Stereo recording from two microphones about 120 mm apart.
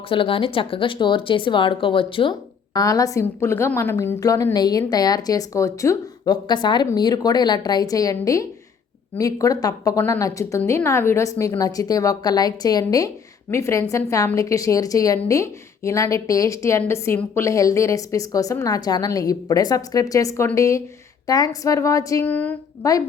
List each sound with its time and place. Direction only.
0.1 s speech: 45° left (ahead or behind)
2.7 s a woman's voice: 30° left (ahead or behind)
22.2 s speech: 15° left (ahead or behind)
22.8 s a woman's voice: 30° left (ahead or behind)